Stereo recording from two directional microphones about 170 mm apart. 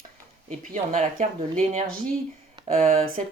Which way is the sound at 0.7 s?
45° right (ahead or behind).